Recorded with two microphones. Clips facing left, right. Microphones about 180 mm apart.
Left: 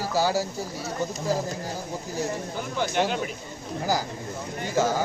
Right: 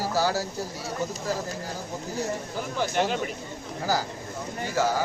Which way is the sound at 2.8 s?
Centre (ahead or behind).